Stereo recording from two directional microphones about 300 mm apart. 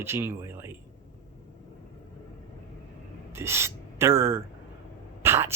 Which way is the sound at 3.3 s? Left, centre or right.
Centre.